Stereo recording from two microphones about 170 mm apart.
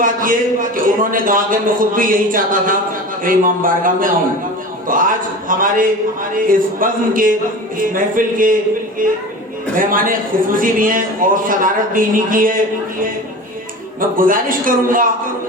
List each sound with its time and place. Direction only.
0.0 s a man's voice: 55° right (ahead or behind)
9.7 s a man's voice: 55° right (ahead or behind)